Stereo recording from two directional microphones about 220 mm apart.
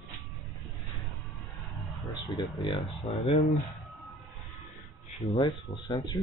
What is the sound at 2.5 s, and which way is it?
Speech, 20° left (ahead or behind).